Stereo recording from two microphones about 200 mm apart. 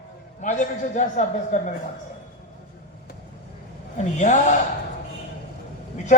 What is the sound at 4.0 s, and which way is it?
Speech, 35° left (ahead or behind).